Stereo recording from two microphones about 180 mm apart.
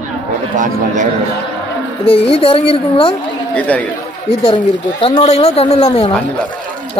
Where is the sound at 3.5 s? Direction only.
10° left (ahead or behind).